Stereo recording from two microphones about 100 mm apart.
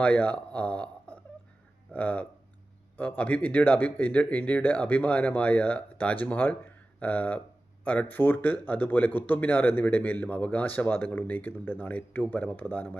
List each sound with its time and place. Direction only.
0.0 s a man's voice: 15° left (ahead or behind)